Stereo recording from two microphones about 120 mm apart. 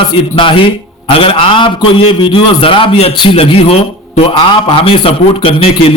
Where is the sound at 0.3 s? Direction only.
45° left (ahead or behind).